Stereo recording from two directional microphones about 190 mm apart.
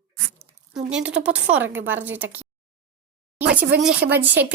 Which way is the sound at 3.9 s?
55° right (ahead or behind).